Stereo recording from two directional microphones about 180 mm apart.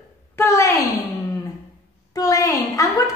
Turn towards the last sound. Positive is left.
turn(degrees=20)  # may be behind; listen again after turning